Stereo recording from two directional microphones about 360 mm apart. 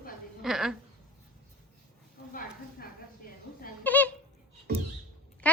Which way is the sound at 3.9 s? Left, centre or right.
Centre.